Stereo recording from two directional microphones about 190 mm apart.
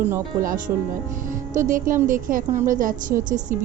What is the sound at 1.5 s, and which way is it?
A woman's voice, 45° right (ahead or behind).